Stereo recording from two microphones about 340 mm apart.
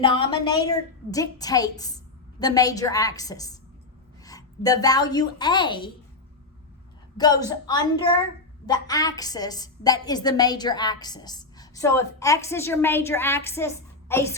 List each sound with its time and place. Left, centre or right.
0.0 s a woman's voice: centre
7.2 s a woman's voice: centre